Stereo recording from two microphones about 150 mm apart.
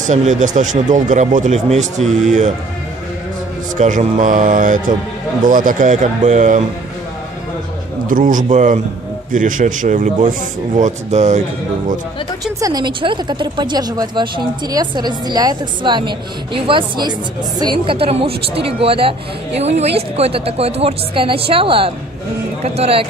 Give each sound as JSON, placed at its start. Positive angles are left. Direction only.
{"t": 0.0, "sound": "speech", "side_deg": -55}
{"t": 3.7, "sound": "speech", "side_deg": -55}
{"t": 8.1, "sound": "speech", "side_deg": -60}
{"t": 12.5, "sound": "a woman's voice", "side_deg": -25}